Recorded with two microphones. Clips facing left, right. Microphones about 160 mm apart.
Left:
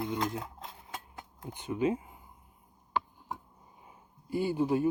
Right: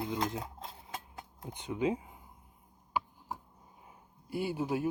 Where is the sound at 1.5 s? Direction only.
15° right (ahead or behind).